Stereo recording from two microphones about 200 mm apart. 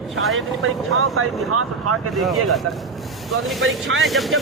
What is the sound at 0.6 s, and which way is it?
Speech, 90° right.